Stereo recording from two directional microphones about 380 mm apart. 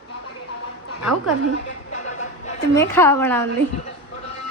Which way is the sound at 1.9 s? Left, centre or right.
Centre.